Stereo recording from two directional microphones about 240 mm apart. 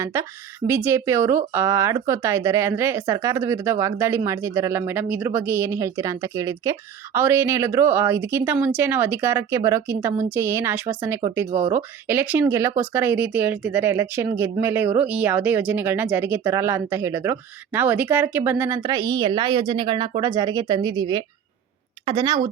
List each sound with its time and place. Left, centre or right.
0.0 s a woman's voice: centre